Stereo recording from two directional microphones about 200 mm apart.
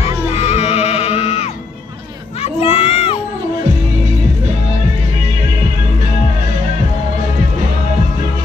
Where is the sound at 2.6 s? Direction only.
30° left (ahead or behind).